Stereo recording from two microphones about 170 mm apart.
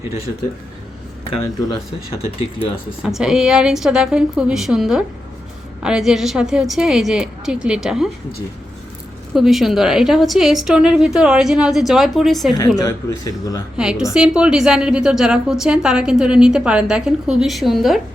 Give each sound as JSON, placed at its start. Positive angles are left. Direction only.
{"t": 3.0, "sound": "a woman's voice", "side_deg": -5}
{"t": 9.3, "sound": "a woman's voice", "side_deg": 0}
{"t": 12.5, "sound": "speech", "side_deg": 20}
{"t": 13.7, "sound": "a woman's voice", "side_deg": -5}